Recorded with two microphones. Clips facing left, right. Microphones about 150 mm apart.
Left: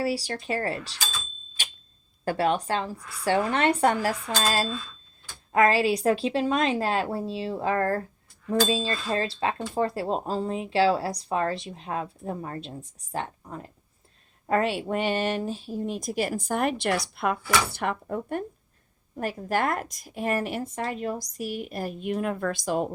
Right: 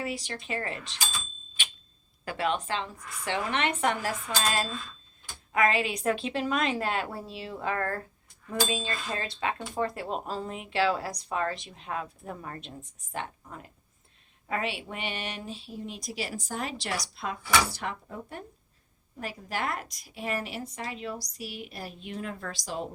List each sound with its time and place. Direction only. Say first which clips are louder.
0.0 s speech: left 7 dB; 35° left (ahead or behind)
1.6 s fire alarm: even; 40° left (ahead or behind)
2.2 s speech: left 5 dB; 40° left (ahead or behind)
14.4 s speech: left 8 dB; 45° left (ahead or behind)